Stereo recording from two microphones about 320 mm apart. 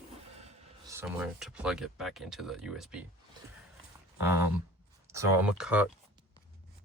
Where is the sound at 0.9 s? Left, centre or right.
Centre.